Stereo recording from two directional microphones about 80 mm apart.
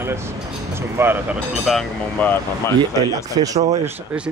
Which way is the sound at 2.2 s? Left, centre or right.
Left.